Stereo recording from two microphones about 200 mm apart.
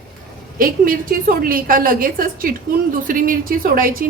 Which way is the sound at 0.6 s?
45° right (ahead or behind).